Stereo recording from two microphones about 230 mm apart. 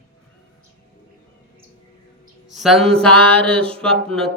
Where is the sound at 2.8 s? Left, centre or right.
Right.